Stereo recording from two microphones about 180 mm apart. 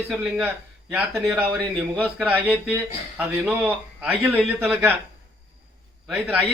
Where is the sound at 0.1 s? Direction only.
5° right (ahead or behind).